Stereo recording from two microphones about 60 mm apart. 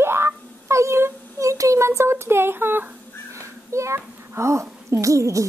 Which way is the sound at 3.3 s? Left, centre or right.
Right.